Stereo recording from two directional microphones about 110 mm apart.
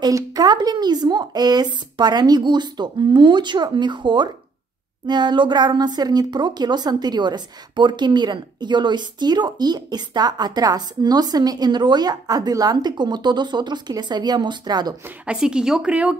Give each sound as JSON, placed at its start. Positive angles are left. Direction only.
{"t": 0.0, "sound": "speech", "side_deg": -35}
{"t": 15.0, "sound": "speech", "side_deg": -10}